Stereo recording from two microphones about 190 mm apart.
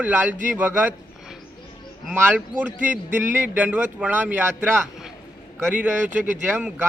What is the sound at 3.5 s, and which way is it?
A man's voice, 10° right (ahead or behind).